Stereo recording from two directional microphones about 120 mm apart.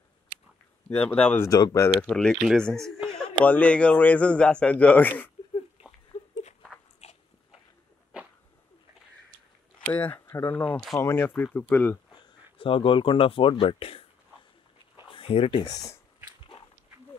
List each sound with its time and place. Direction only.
0.8 s a man's voice: 10° left (ahead or behind)
1.4 s speech: 30° left (ahead or behind)
2.0 s a man's voice: 5° left (ahead or behind)
7.0 s biting: 65° left (ahead or behind)
9.8 s a man's voice: 15° left (ahead or behind)
12.5 s speech: 45° left (ahead or behind)
15.0 s a sound: 50° left (ahead or behind)
15.6 s speech: 30° left (ahead or behind)